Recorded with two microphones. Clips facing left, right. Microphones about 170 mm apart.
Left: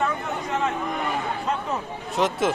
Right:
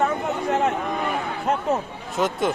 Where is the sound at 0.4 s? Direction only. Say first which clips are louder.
Right 4 dB; 60° right (ahead or behind).